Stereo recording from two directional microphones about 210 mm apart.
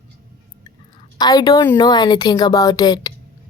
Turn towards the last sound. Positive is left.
turn(degrees=20)  # may be behind; listen again after turning